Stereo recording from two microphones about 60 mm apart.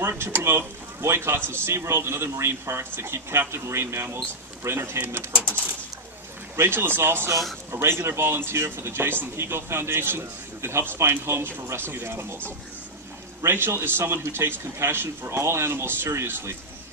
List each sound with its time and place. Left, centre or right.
0.2 s speech: right
6.5 s speech: right
13.4 s speech: right